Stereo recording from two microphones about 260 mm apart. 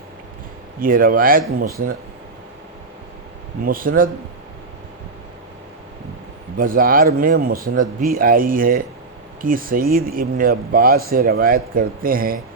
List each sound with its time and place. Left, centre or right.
0.8 s speech: right
3.6 s speech: right
6.6 s speech: right